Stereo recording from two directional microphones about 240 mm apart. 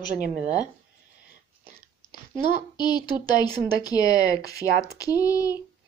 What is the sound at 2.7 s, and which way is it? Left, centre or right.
Speech, centre.